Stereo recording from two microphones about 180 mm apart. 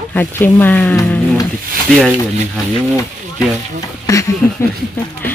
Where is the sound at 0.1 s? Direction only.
10° left (ahead or behind).